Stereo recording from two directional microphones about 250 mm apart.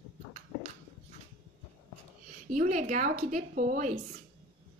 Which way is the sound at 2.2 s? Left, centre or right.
Right.